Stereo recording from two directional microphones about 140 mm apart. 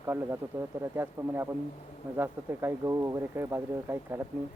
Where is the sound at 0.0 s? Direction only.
15° right (ahead or behind).